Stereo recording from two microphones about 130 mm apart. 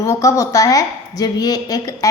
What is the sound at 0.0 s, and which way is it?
A woman's voice, 25° left (ahead or behind).